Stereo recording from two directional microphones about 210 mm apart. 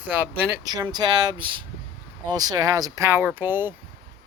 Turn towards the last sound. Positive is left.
turn(degrees=-10)  # may be behind; listen again after turning